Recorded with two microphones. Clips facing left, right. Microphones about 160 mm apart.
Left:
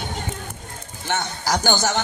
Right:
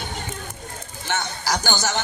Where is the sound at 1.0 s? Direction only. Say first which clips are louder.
Left 2 dB; 50° left (ahead or behind).